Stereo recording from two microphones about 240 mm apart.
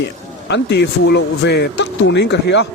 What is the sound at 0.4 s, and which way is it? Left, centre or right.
Speech, left.